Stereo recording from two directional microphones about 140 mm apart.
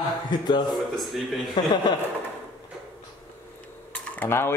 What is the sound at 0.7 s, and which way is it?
Speech, centre (ahead or behind).